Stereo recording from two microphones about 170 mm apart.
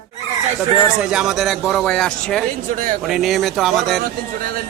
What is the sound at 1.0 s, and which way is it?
A man's voice, 5° right (ahead or behind).